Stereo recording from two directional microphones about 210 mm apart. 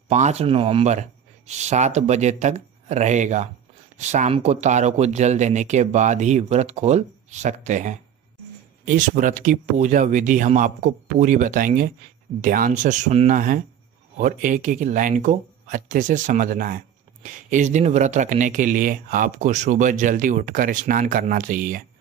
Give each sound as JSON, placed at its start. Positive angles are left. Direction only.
{"t": 0.1, "sound": "speech", "side_deg": -35}